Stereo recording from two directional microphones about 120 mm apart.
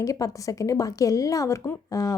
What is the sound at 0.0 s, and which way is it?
A woman's voice, 30° left (ahead or behind).